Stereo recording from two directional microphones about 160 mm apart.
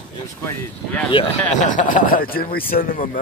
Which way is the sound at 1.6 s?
50° left (ahead or behind).